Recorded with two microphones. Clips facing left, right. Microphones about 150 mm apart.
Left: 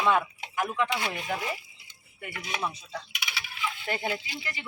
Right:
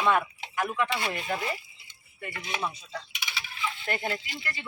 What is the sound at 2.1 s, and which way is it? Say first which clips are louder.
Coin: even; 10° left (ahead or behind).